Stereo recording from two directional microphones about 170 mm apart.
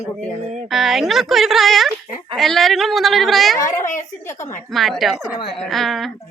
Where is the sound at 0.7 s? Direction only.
Centre (ahead or behind).